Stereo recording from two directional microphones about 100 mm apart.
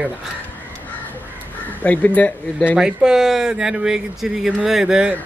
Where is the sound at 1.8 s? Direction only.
15° left (ahead or behind).